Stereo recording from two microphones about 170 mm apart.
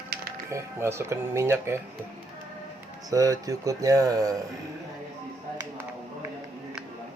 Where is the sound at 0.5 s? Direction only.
15° right (ahead or behind).